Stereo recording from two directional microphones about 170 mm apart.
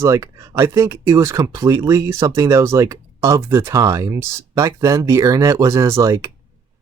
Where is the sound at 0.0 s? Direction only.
15° right (ahead or behind).